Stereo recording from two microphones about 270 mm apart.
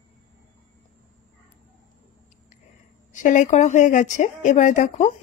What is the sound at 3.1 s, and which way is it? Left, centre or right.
Speech, left.